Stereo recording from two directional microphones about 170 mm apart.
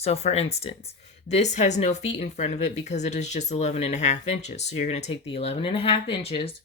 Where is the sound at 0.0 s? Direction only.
40° left (ahead or behind).